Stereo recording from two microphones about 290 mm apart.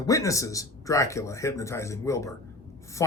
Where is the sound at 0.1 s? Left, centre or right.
Centre.